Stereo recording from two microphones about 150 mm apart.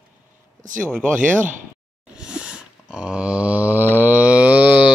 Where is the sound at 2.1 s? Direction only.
5° right (ahead or behind).